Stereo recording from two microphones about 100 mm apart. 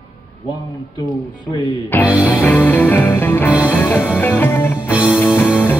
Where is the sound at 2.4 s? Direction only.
15° left (ahead or behind).